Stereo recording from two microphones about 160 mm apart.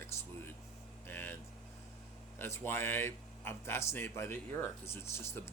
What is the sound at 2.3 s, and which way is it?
Speech, 15° left (ahead or behind).